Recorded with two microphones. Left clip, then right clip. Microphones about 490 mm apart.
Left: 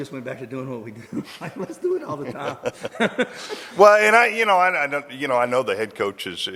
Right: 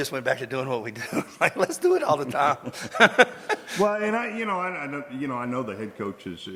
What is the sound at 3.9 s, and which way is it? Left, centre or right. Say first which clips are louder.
A man's voice: left 12 dB; left.